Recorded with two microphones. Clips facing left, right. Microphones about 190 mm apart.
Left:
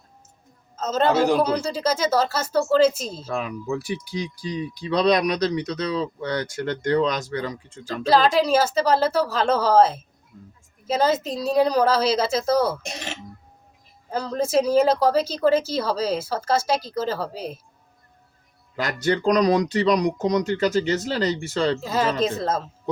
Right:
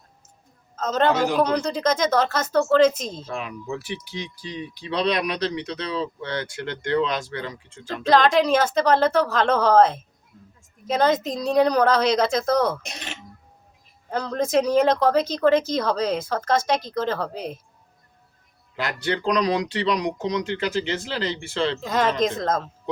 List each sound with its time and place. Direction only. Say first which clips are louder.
0.8 s speech: left 1 dB; 5° left (ahead or behind)
3.3 s speech: left 6 dB; 40° left (ahead or behind)
8.0 s speech: right 1 dB; 5° left (ahead or behind)
14.1 s speech: even; 5° left (ahead or behind)
18.8 s speech: left 3 dB; 40° left (ahead or behind)
21.8 s speech: right 1 dB; 5° left (ahead or behind)